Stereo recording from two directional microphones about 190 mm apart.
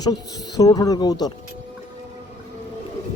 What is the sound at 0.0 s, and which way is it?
Speech, 20° left (ahead or behind).